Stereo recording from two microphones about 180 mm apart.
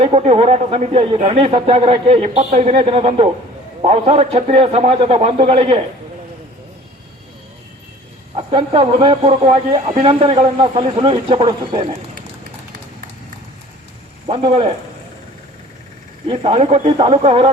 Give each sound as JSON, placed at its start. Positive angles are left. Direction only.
{"t": 0.0, "sound": "speech", "side_deg": -35}
{"t": 8.4, "sound": "speech", "side_deg": -30}
{"t": 14.3, "sound": "speech", "side_deg": -35}
{"t": 16.2, "sound": "speech", "side_deg": -30}